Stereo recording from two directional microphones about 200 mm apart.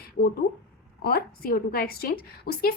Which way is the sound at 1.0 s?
50° left (ahead or behind).